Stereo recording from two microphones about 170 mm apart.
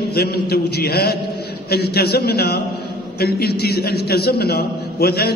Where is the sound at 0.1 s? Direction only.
70° left (ahead or behind).